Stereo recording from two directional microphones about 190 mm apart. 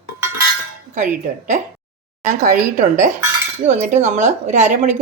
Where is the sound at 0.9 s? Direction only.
40° right (ahead or behind).